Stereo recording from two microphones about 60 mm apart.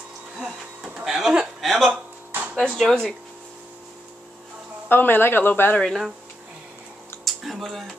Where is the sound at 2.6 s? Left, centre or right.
Centre.